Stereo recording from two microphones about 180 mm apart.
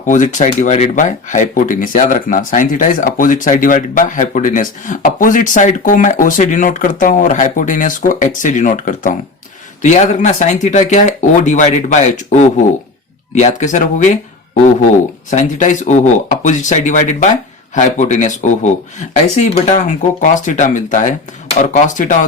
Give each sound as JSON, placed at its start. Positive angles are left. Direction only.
{"t": 0.0, "sound": "speech", "side_deg": 45}
{"t": 15.3, "sound": "speech", "side_deg": 45}